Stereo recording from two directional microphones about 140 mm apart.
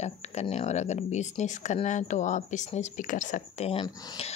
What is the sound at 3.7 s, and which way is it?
Speech, 45° left (ahead or behind).